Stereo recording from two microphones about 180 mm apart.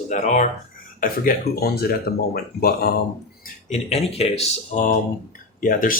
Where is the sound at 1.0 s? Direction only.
55° left (ahead or behind).